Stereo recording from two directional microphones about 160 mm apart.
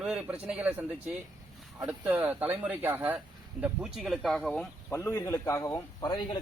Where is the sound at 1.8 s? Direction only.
10° right (ahead or behind).